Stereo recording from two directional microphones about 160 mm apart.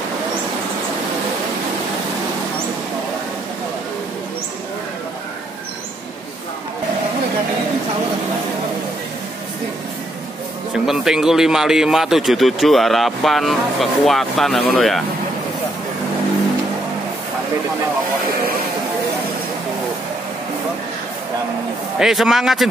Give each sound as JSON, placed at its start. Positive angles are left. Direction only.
{"t": 10.7, "sound": "a man's voice", "side_deg": -5}
{"t": 21.9, "sound": "a man's voice", "side_deg": 0}